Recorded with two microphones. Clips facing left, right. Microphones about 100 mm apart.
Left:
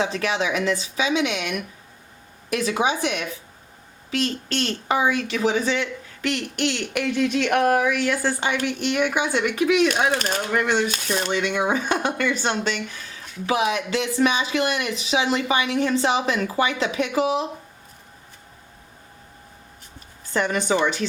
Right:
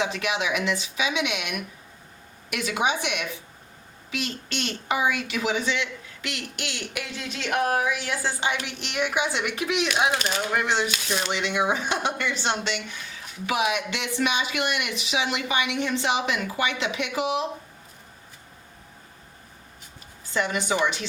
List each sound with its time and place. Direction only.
0.0 s a woman's voice: 35° left (ahead or behind)
13.5 s speech: 35° left (ahead or behind)
20.3 s a woman's voice: 45° left (ahead or behind)